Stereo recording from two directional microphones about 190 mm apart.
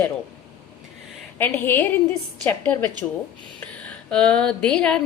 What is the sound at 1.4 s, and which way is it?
A woman's voice, 10° left (ahead or behind).